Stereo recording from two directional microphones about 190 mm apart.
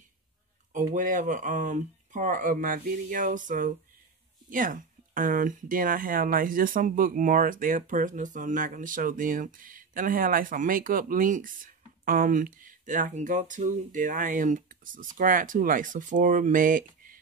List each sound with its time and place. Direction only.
0.7 s speech: 45° right (ahead or behind)